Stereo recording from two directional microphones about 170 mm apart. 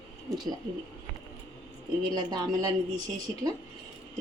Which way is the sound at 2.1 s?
25° right (ahead or behind).